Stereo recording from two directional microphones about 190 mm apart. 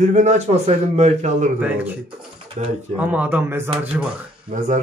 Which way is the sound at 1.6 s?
10° right (ahead or behind).